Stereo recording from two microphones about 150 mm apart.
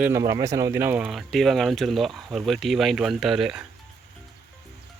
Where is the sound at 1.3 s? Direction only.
Centre (ahead or behind).